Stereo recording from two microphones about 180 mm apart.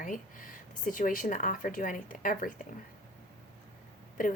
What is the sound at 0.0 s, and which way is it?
Speech, 50° left (ahead or behind).